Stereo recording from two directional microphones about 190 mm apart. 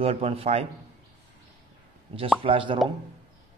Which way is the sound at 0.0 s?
30° right (ahead or behind).